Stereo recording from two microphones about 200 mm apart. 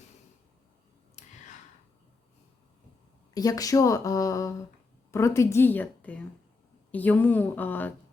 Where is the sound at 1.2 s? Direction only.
35° left (ahead or behind).